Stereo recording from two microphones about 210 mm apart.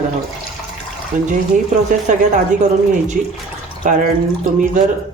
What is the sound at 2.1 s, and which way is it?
Speech, 35° right (ahead or behind).